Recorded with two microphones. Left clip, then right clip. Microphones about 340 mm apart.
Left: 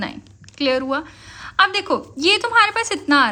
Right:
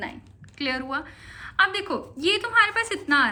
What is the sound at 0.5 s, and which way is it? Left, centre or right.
A woman's voice, centre.